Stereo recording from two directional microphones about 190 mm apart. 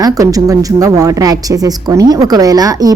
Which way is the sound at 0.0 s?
20° right (ahead or behind).